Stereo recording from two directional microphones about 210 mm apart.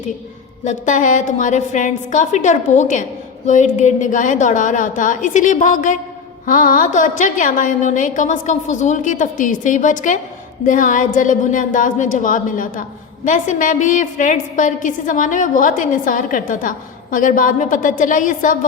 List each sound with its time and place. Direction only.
0.6 s a woman's voice: 35° left (ahead or behind)